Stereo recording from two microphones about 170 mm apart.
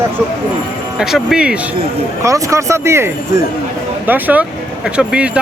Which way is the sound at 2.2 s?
15° right (ahead or behind).